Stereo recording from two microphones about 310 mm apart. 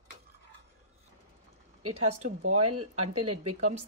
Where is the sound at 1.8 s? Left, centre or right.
Right.